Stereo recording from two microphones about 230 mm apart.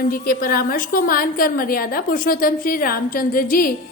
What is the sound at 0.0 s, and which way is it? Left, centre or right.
A woman's voice, left.